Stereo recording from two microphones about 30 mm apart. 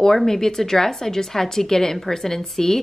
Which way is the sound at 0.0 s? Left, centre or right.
Centre.